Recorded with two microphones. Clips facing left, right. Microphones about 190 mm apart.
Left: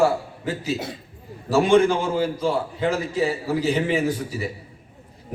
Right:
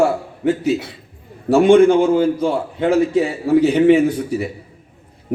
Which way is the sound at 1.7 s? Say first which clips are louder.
Right 7 dB; 55° right (ahead or behind).